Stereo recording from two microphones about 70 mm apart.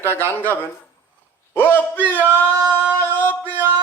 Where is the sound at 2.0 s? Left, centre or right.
Right.